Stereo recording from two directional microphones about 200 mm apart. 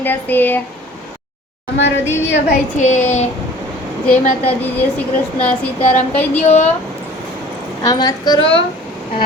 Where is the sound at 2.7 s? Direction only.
35° left (ahead or behind).